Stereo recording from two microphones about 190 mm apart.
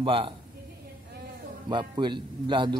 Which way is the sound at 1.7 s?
25° right (ahead or behind).